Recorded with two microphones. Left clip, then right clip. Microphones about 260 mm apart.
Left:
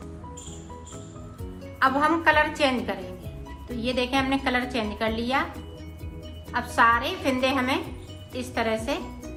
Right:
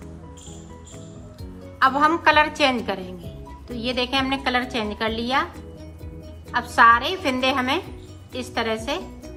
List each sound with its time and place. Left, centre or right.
1.8 s a woman's voice: centre
6.5 s a woman's voice: centre